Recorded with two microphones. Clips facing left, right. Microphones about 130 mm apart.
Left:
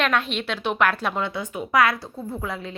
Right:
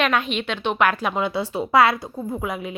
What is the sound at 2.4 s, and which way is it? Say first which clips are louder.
Speech: right 3 dB; 15° right (ahead or behind).